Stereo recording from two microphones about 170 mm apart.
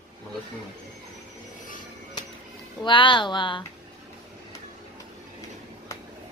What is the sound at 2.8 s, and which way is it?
Speech, 30° left (ahead or behind).